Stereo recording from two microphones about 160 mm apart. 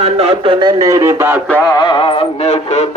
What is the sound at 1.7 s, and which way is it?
Music, 30° left (ahead or behind).